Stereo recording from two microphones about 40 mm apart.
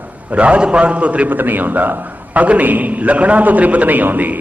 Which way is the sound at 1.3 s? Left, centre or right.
Right.